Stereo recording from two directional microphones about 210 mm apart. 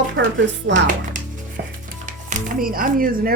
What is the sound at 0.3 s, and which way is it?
Speech, 60° right (ahead or behind).